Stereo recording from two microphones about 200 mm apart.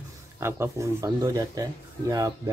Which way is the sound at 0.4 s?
10° right (ahead or behind).